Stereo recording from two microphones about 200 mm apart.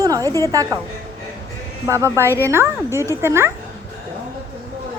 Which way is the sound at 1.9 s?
15° right (ahead or behind).